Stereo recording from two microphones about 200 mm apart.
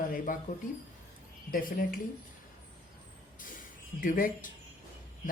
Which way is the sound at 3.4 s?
45° left (ahead or behind).